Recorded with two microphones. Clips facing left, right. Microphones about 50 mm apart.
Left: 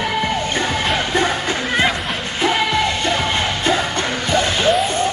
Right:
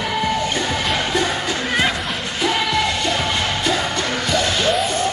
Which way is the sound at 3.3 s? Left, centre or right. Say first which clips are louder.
Left 2 dB; left.